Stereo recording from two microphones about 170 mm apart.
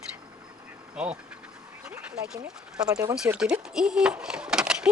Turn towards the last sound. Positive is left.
turn(degrees=-5)  # may be behind; listen again after turning